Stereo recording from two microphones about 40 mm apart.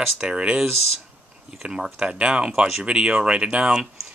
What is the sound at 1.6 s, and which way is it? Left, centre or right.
Speech, centre.